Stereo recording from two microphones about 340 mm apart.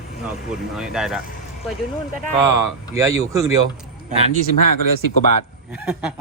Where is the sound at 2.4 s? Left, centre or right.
Centre.